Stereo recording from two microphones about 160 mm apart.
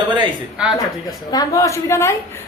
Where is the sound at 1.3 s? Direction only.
20° left (ahead or behind).